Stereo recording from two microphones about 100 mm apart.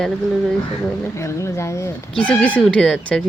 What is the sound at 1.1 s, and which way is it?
Speech, 30° left (ahead or behind).